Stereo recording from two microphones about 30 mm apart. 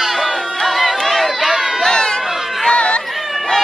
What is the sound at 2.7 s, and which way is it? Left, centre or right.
Chatter, left.